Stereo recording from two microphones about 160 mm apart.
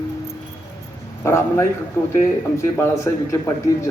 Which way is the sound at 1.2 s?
15° left (ahead or behind).